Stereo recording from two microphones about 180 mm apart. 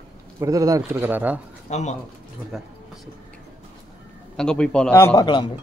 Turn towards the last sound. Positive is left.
turn(degrees=25)  # may be behind; listen again after turning